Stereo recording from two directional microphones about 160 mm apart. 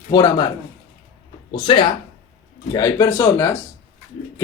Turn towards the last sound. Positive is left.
turn(degrees=15)  # may be behind; listen again after turning